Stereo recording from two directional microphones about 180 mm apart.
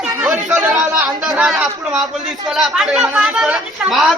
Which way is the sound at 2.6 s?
5° right (ahead or behind).